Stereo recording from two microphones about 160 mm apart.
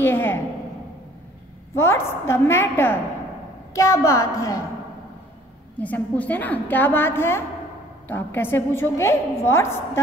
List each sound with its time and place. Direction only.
0.0 s a sound: 15° left (ahead or behind)
1.8 s a woman's voice: 15° left (ahead or behind)
5.8 s a woman's voice: 10° left (ahead or behind)